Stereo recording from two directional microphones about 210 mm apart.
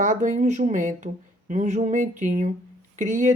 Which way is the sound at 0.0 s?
35° right (ahead or behind).